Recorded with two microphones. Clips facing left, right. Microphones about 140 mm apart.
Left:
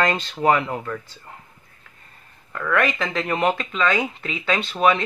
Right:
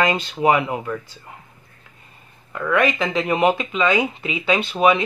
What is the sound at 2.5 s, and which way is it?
Speech, 10° right (ahead or behind).